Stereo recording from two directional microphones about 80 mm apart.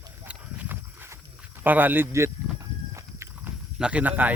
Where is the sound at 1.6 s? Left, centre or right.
Right.